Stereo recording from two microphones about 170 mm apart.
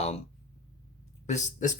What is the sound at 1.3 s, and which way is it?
Speech, 45° left (ahead or behind).